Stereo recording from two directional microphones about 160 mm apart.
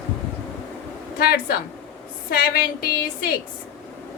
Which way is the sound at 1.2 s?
75° left (ahead or behind).